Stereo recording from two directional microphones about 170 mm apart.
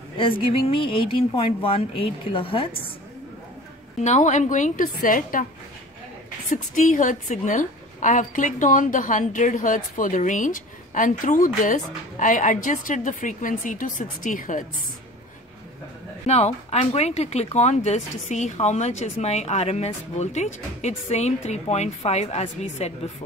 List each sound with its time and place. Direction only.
0.4 s speech: 30° left (ahead or behind)
4.0 s a woman's voice: 45° left (ahead or behind)
6.5 s a woman's voice: 50° left (ahead or behind)
16.3 s speech: 40° left (ahead or behind)